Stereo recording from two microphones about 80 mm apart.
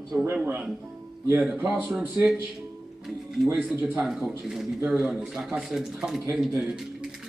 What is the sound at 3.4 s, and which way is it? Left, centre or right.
A man's voice, centre.